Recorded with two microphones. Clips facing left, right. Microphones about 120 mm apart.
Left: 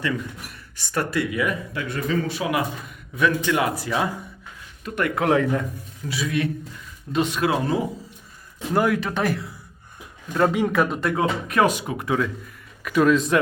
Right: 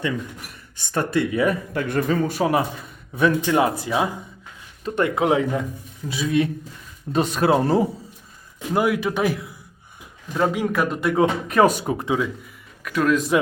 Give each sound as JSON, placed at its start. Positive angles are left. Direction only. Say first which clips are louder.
{"t": 0.9, "sound": "speech", "louder": "right 3 dB", "side_deg": -25}
{"t": 6.1, "sound": "speech", "louder": "right 4 dB", "side_deg": -25}
{"t": 7.1, "sound": "speech", "louder": "right 3 dB", "side_deg": -40}
{"t": 8.7, "sound": "a man's voice", "louder": "right 1 dB", "side_deg": -10}
{"t": 11.4, "sound": "speech", "louder": "right 3 dB", "side_deg": -35}
{"t": 12.0, "sound": "speech", "louder": "left 1 dB", "side_deg": -10}
{"t": 12.8, "sound": "a man's voice", "louder": "left 2 dB", "side_deg": 5}